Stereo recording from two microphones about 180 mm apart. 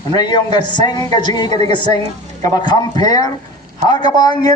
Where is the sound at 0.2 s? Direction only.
25° left (ahead or behind).